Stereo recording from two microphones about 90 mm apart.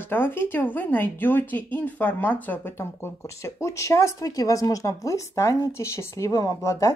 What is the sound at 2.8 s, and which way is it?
Speech, 30° left (ahead or behind).